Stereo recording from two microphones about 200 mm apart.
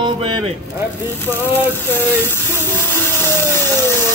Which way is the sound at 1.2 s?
10° left (ahead or behind).